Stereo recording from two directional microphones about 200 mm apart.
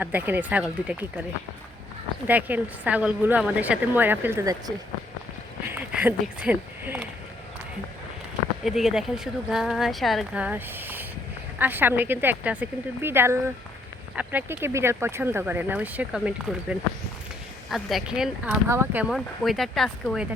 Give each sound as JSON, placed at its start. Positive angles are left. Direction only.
{"t": 0.0, "sound": "speech", "side_deg": -10}
{"t": 2.2, "sound": "speech", "side_deg": -10}
{"t": 5.7, "sound": "speech", "side_deg": -10}
{"t": 8.6, "sound": "speech", "side_deg": 0}